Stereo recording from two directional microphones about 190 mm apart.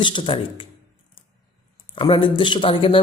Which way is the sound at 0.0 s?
25° left (ahead or behind).